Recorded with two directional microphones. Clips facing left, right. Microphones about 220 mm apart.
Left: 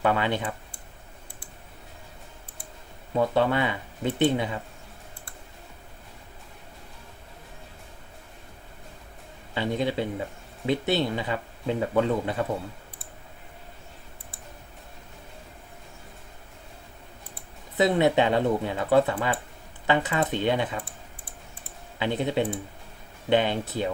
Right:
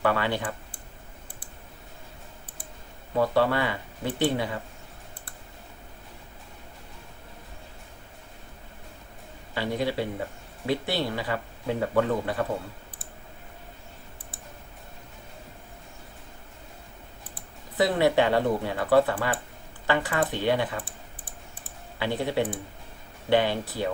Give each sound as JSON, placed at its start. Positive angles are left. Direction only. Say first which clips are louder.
{"t": 0.0, "sound": "speech", "louder": "left 1 dB", "side_deg": 20}
{"t": 3.2, "sound": "speech", "louder": "even", "side_deg": 20}
{"t": 9.6, "sound": "speech", "louder": "left 1 dB", "side_deg": 20}
{"t": 17.7, "sound": "speech", "louder": "left 1 dB", "side_deg": 20}
{"t": 21.9, "sound": "speech", "louder": "left 1 dB", "side_deg": 20}